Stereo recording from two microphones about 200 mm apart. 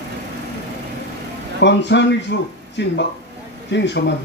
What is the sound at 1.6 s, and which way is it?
Speech, 60° left (ahead or behind).